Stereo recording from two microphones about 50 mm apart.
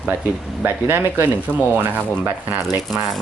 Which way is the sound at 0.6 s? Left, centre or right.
Right.